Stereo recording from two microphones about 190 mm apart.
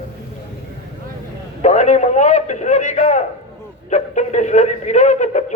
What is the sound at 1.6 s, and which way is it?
A man's voice, 35° left (ahead or behind).